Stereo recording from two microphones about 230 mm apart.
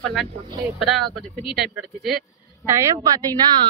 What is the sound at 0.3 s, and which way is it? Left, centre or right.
Speech, centre.